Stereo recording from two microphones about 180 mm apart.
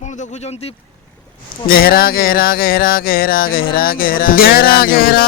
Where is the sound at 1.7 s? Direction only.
55° left (ahead or behind).